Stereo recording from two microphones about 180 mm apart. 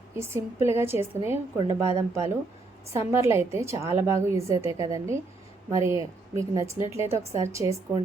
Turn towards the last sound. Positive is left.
turn(degrees=-15)  # may be behind; listen again after turning